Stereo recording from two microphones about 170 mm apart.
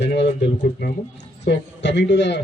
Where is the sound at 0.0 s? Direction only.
75° left (ahead or behind).